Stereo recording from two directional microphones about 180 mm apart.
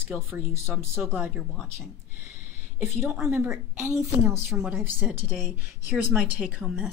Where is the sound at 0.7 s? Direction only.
15° right (ahead or behind).